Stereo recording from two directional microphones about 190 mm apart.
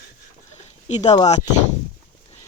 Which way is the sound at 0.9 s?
35° left (ahead or behind).